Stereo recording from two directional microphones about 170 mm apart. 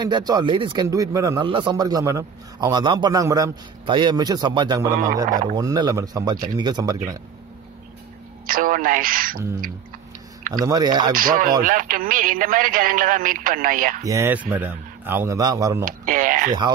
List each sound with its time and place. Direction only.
0.0 s a man's voice: 25° right (ahead or behind)
5.3 s speech: 50° right (ahead or behind)
5.6 s a man's voice: 25° right (ahead or behind)
8.5 s speech: 55° right (ahead or behind)
10.6 s a man's voice: 25° right (ahead or behind)
11.1 s speech: 55° right (ahead or behind)
14.0 s a man's voice: 15° right (ahead or behind)
15.8 s speech: 50° right (ahead or behind)